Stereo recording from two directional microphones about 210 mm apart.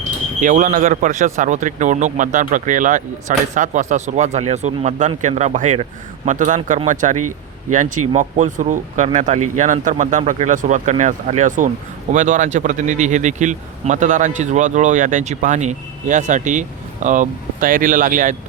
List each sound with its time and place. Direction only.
0.3 s speech: 40° right (ahead or behind)